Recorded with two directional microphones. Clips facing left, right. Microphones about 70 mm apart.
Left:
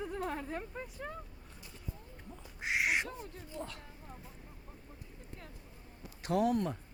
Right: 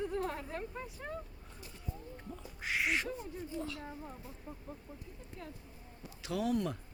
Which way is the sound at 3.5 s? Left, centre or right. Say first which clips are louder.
Right 1 dB; left.